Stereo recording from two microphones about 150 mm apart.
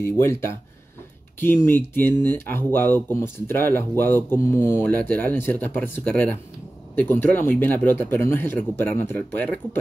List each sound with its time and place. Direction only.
0.0 s speech: 15° left (ahead or behind)